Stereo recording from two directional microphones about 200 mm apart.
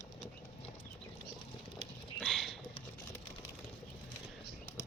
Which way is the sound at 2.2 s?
Centre (ahead or behind).